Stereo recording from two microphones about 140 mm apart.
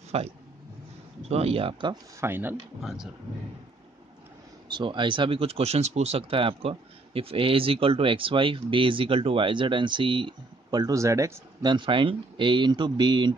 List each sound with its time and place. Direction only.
0.1 s speech: 45° right (ahead or behind)
2.1 s speech: 15° right (ahead or behind)
2.8 s speech: 5° right (ahead or behind)
4.6 s speech: 35° right (ahead or behind)
11.7 s speech: 35° right (ahead or behind)